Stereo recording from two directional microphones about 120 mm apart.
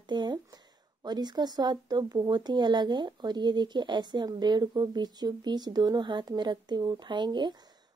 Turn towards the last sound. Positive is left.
turn(degrees=-40)  # may be behind; listen again after turning